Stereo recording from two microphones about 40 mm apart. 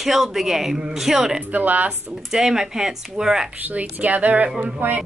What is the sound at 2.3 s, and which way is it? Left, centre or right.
Speech, centre.